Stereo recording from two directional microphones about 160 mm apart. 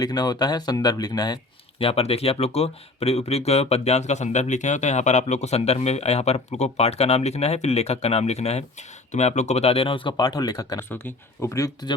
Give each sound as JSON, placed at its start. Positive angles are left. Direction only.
{"t": 0.0, "sound": "speech", "side_deg": 25}
{"t": 1.8, "sound": "speech", "side_deg": 40}